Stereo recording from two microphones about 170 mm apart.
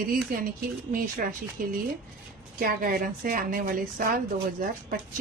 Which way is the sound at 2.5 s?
55° right (ahead or behind).